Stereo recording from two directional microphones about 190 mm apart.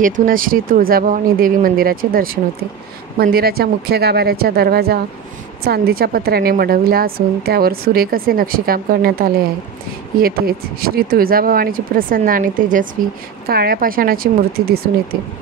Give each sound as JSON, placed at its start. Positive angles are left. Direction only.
{"t": 0.0, "sound": "a woman's voice", "side_deg": -45}